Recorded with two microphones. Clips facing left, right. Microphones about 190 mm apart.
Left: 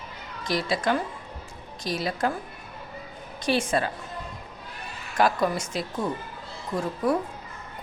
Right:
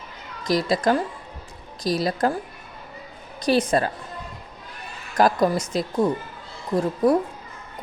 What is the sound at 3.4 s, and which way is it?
Speech, 40° right (ahead or behind).